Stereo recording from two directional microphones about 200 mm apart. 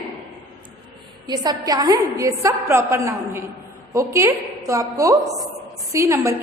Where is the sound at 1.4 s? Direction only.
20° right (ahead or behind).